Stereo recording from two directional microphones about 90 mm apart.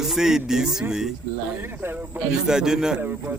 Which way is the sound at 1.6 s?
25° right (ahead or behind).